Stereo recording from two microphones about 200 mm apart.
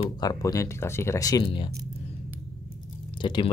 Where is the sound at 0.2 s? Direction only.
20° left (ahead or behind).